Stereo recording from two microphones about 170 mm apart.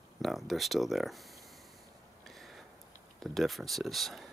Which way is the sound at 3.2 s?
Centre (ahead or behind).